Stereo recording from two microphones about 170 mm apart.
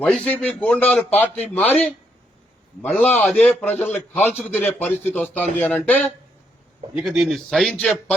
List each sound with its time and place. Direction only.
0.0 s a man's voice: 5° left (ahead or behind)
2.8 s a man's voice: 10° left (ahead or behind)
6.9 s a man's voice: 5° right (ahead or behind)